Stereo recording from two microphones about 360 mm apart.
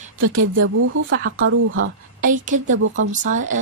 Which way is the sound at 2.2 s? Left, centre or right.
Right.